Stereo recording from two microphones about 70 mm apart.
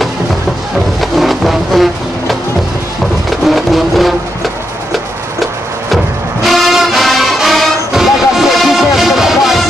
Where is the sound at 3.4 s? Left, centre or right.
Centre.